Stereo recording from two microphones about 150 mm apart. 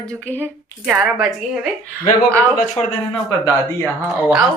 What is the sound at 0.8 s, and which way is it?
Speech, 5° right (ahead or behind).